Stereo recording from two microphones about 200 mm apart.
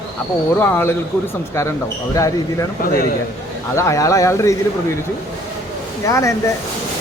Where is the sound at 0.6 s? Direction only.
10° left (ahead or behind).